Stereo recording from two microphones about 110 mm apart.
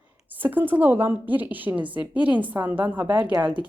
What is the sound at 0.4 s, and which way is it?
A woman's voice, 15° right (ahead or behind).